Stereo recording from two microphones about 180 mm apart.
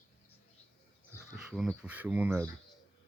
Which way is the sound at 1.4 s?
5° right (ahead or behind).